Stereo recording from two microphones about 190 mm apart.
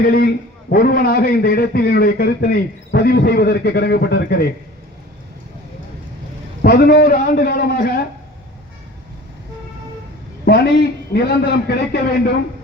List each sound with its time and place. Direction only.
0.0 s a man's voice: 50° left (ahead or behind)
6.6 s a man's voice: 55° left (ahead or behind)
10.4 s a man's voice: 55° left (ahead or behind)